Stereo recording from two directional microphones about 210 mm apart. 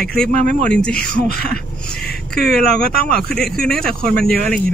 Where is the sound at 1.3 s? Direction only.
50° left (ahead or behind).